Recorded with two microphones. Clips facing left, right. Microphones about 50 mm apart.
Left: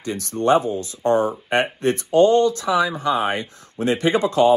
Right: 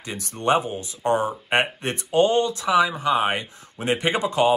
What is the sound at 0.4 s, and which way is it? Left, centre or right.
Speech, right.